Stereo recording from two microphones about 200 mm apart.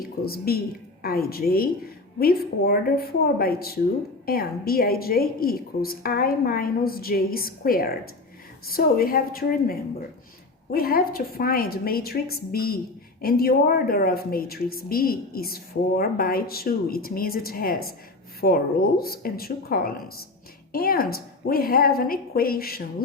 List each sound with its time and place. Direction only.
0.0 s a woman's voice: 50° left (ahead or behind)